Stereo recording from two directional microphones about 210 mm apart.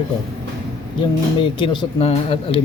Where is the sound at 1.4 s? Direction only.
25° left (ahead or behind).